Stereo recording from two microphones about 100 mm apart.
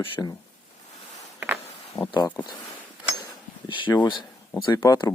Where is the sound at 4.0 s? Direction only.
50° left (ahead or behind).